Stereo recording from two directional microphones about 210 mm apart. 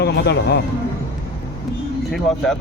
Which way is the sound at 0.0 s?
55° left (ahead or behind).